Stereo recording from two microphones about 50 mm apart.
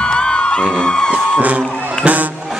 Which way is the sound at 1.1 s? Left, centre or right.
Right.